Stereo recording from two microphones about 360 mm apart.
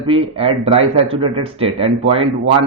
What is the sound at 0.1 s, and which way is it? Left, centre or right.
A man's voice, centre.